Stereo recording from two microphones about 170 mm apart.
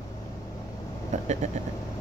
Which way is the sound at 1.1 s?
45° right (ahead or behind).